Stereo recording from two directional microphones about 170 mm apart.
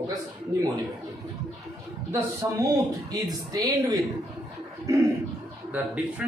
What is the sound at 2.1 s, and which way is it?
Speech, 20° right (ahead or behind).